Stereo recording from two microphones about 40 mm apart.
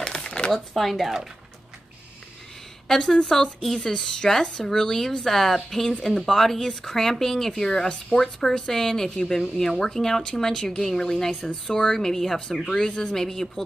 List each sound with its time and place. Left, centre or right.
0.0 s a sound: centre
0.5 s speech: centre
2.9 s a woman's voice: centre
10.8 s speech: centre